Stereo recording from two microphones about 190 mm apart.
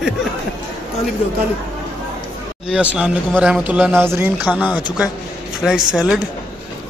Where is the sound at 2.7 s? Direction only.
5° right (ahead or behind).